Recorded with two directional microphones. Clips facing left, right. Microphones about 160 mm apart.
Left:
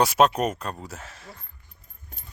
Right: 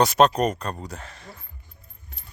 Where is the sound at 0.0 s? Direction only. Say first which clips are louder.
Right 2 dB; 5° left (ahead or behind).